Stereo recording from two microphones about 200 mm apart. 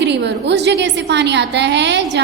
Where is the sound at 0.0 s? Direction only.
60° right (ahead or behind).